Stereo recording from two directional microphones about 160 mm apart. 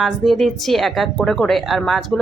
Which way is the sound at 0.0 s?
Centre (ahead or behind).